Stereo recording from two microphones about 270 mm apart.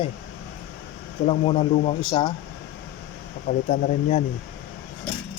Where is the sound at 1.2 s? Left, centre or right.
Left.